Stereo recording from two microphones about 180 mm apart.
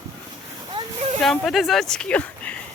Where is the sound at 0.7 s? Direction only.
30° right (ahead or behind).